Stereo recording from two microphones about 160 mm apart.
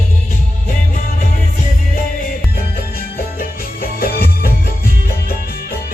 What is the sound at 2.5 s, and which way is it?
Music, 70° left (ahead or behind).